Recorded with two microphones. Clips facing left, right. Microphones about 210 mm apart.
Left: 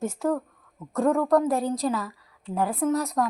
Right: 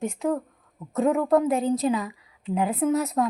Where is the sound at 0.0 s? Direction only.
20° right (ahead or behind).